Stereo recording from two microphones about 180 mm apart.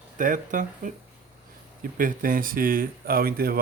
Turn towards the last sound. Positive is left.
turn(degrees=-55)  # may be behind; listen again after turning